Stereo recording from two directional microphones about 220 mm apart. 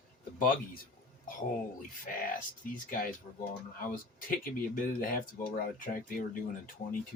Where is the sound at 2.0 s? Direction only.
40° left (ahead or behind).